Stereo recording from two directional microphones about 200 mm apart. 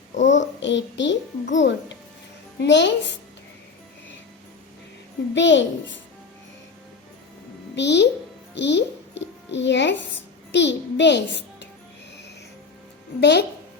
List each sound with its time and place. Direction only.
0.2 s a child's voice: 65° left (ahead or behind)
5.3 s a child's voice: 65° left (ahead or behind)
7.8 s a child's voice: 60° left (ahead or behind)
13.1 s a child's voice: 55° left (ahead or behind)